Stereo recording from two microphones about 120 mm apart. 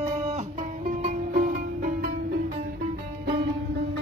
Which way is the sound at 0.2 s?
70° right (ahead or behind).